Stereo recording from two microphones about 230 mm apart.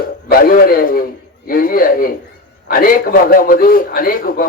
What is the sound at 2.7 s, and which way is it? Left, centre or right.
A man's voice, left.